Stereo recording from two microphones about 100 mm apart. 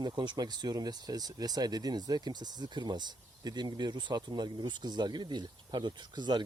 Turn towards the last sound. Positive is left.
turn(degrees=-50)  # may be behind; listen again after turning